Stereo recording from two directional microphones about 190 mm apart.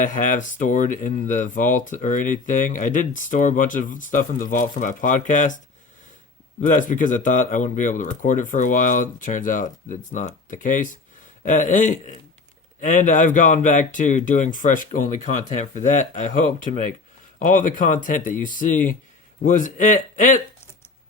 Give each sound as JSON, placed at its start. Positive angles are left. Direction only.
{"t": 0.0, "sound": "speech", "side_deg": 45}
{"t": 6.6, "sound": "speech", "side_deg": 40}